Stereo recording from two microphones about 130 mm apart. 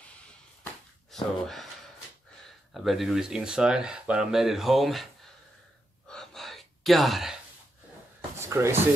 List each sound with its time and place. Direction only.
1.1 s speech: centre (ahead or behind)
2.7 s speech: centre (ahead or behind)
6.0 s gasp: 5° left (ahead or behind)
8.4 s a sound: 20° right (ahead or behind)